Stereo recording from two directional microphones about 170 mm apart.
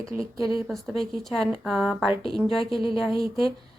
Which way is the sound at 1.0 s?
Centre (ahead or behind).